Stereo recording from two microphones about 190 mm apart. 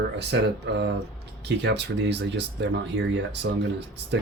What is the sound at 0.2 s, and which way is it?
Speech, 60° right (ahead or behind).